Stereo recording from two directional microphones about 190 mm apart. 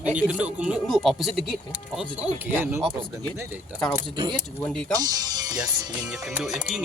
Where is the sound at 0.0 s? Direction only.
5° right (ahead or behind).